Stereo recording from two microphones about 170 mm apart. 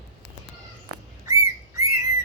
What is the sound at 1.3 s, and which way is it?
Whistling, 20° right (ahead or behind).